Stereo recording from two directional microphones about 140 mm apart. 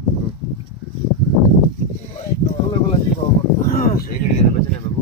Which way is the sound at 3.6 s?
90° left.